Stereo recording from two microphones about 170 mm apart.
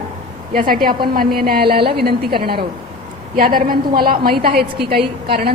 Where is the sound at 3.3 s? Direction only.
60° right (ahead or behind).